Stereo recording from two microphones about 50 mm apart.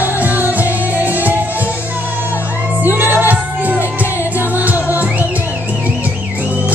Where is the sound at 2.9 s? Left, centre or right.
Right.